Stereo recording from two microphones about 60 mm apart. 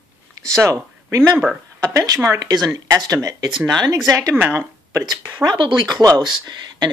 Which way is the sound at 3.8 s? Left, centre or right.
Right.